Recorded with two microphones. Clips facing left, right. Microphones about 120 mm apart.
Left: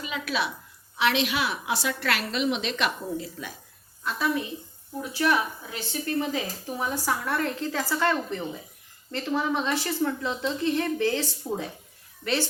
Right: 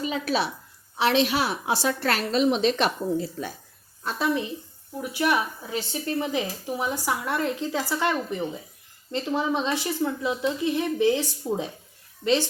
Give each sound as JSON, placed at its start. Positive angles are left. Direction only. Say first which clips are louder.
{"t": 0.0, "sound": "a woman's voice", "louder": "right 4 dB", "side_deg": -35}